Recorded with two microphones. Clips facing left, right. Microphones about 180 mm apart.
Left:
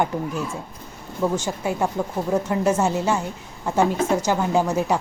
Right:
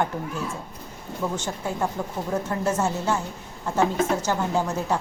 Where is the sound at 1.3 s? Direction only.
10° left (ahead or behind).